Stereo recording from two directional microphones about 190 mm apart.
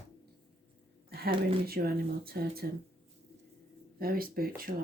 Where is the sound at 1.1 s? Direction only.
55° right (ahead or behind).